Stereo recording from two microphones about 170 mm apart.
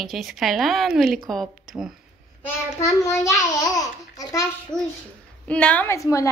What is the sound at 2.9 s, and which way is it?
A child's voice, 15° left (ahead or behind).